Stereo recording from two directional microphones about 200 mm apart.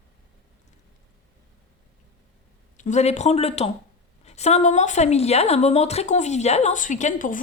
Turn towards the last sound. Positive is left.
turn(degrees=40)  # may be behind; listen again after turning